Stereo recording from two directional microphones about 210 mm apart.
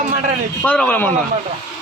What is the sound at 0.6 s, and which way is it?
Speech, 5° left (ahead or behind).